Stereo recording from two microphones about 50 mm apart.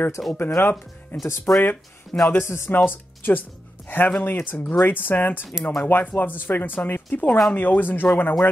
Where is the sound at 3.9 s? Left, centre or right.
Left.